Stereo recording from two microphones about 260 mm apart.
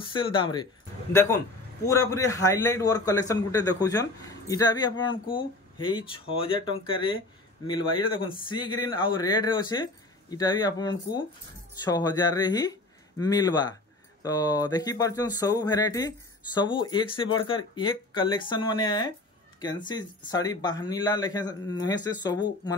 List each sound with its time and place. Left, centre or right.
0.0 s speech: centre